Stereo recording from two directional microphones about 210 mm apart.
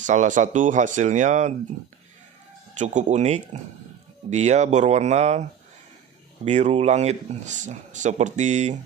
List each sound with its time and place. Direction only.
0.0 s speech: 35° right (ahead or behind)
2.8 s speech: 35° right (ahead or behind)